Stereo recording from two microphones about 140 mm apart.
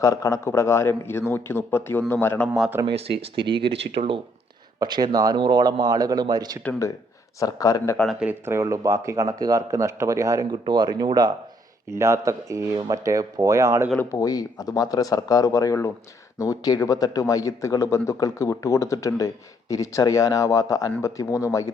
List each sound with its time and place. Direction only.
0.0 s a man's voice: 25° left (ahead or behind)
2.8 s speech: 40° right (ahead or behind)
4.8 s speech: 30° right (ahead or behind)
7.3 s a man's voice: 25° left (ahead or behind)
8.2 s speech: 15° right (ahead or behind)
13.9 s a man's voice: 10° left (ahead or behind)
14.2 s a man's voice: 25° left (ahead or behind)